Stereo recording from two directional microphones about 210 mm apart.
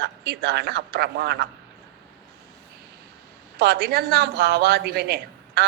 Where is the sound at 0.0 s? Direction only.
50° right (ahead or behind).